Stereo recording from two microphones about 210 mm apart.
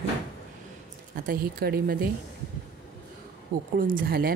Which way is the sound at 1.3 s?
45° right (ahead or behind).